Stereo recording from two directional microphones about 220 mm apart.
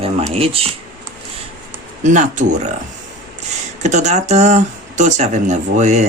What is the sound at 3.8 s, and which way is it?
Speech, 30° right (ahead or behind).